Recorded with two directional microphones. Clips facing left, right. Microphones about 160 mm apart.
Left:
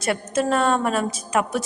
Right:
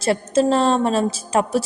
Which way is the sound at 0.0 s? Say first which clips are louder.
Right 5 dB; 30° right (ahead or behind).